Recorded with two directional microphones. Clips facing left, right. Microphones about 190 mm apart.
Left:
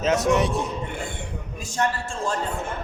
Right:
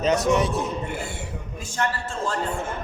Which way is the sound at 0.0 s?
Centre (ahead or behind).